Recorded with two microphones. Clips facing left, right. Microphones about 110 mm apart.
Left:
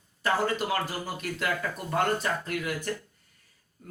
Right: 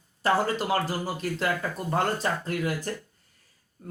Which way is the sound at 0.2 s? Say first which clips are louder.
Right 2 dB; 35° right (ahead or behind).